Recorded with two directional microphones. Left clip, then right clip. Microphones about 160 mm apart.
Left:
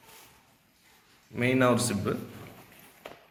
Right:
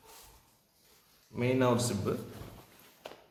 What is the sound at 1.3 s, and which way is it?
Speech, 20° left (ahead or behind).